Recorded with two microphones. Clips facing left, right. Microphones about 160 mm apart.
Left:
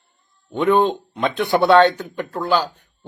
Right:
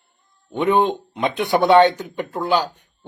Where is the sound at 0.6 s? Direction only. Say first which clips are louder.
Left 1 dB; 10° right (ahead or behind).